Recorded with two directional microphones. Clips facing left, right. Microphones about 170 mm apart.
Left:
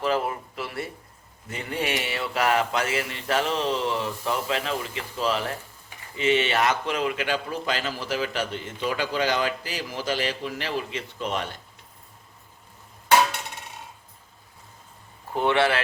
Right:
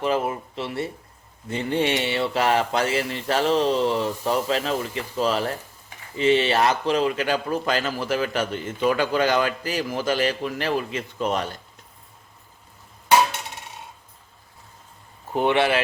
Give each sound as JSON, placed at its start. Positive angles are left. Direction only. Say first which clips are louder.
{"t": 0.0, "sound": "speech", "louder": "right 2 dB", "side_deg": -20}
{"t": 15.3, "sound": "speech", "louder": "right 2 dB", "side_deg": -20}